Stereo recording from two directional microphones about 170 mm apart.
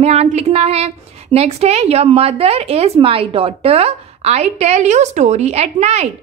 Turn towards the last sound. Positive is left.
turn(degrees=-40)  # may be behind; listen again after turning